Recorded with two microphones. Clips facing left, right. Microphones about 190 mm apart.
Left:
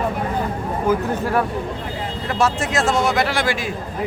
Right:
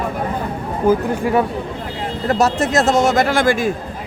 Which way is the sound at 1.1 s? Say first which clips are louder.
Right 3 dB; 15° right (ahead or behind).